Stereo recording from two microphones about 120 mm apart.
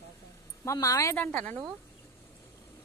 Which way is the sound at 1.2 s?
10° left (ahead or behind).